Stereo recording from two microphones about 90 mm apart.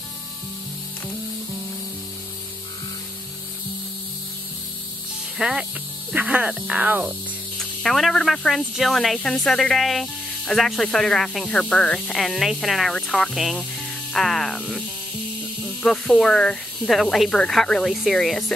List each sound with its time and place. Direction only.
5.4 s speech: 5° right (ahead or behind)
7.5 s speech: 5° left (ahead or behind)
15.8 s speech: 5° left (ahead or behind)